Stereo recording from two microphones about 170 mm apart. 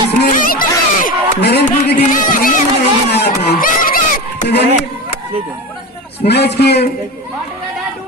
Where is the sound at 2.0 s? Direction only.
50° left (ahead or behind).